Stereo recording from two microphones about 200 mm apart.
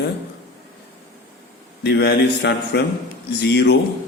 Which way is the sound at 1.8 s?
55° left (ahead or behind).